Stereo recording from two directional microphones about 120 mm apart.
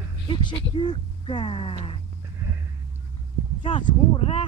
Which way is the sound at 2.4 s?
20° right (ahead or behind).